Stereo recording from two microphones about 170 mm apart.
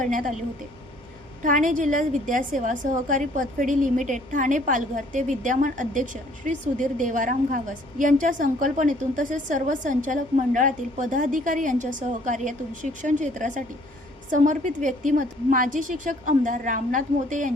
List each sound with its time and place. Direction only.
0.0 s a woman's voice: 50° right (ahead or behind)
1.5 s a woman's voice: 50° right (ahead or behind)